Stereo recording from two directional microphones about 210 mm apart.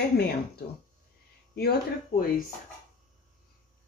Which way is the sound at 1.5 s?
45° left (ahead or behind).